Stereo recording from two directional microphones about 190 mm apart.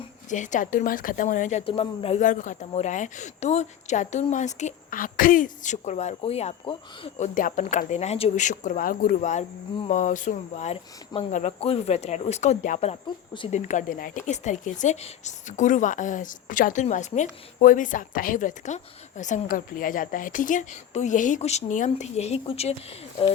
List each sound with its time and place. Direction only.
0.3 s a woman's voice: 40° left (ahead or behind)
7.3 s a woman's voice: 40° left (ahead or behind)
13.6 s a woman's voice: 40° left (ahead or behind)